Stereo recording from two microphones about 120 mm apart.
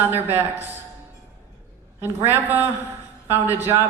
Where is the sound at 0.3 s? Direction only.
15° right (ahead or behind).